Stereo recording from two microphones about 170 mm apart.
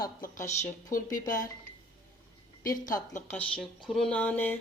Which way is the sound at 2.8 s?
50° left (ahead or behind).